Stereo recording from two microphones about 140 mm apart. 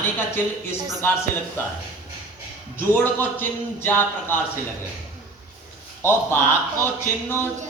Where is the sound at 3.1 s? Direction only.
15° left (ahead or behind).